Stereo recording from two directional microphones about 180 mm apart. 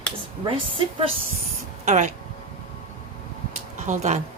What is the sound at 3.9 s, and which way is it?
Speech, 40° right (ahead or behind).